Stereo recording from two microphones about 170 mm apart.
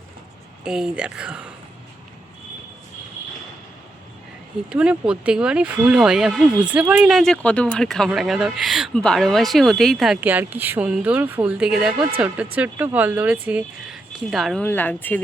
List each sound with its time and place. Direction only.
0.6 s speech: 5° right (ahead or behind)
4.7 s speech: 5° right (ahead or behind); by 15.2 s 10° left (ahead or behind)